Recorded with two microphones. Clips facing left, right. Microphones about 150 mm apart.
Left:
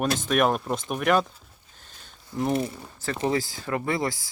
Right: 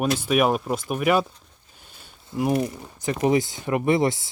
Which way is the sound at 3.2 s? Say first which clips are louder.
Right 5 dB; 20° right (ahead or behind).